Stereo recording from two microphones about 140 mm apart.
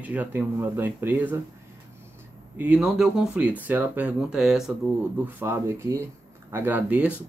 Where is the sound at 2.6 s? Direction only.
10° right (ahead or behind).